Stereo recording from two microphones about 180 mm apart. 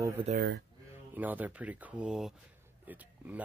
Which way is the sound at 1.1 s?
10° right (ahead or behind).